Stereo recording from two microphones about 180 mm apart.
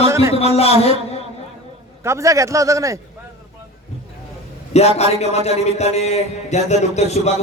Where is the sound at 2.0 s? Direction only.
15° right (ahead or behind).